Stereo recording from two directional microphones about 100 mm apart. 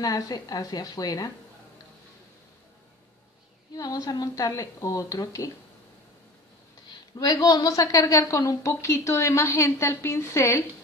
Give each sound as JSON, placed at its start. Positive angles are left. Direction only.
{"t": 0.0, "sound": "a woman's voice", "side_deg": 40}
{"t": 3.7, "sound": "a woman's voice", "side_deg": 40}
{"t": 7.2, "sound": "a woman's voice", "side_deg": 40}